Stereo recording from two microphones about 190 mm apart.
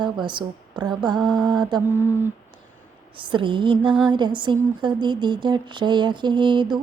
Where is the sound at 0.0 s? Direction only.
25° right (ahead or behind).